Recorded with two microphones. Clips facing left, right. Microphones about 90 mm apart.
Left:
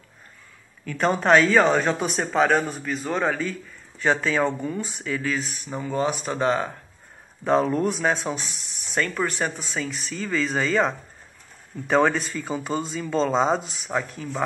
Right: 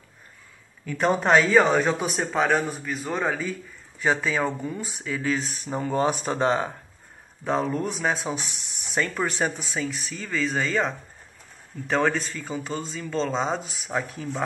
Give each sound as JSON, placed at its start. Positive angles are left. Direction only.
{"t": 0.8, "sound": "speech", "side_deg": -10}
{"t": 5.2, "sound": "speech", "side_deg": -25}
{"t": 5.8, "sound": "speech", "side_deg": -35}
{"t": 7.4, "sound": "speech", "side_deg": 0}